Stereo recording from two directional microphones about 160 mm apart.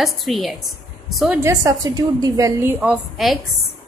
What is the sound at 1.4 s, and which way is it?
A woman's voice, 20° right (ahead or behind).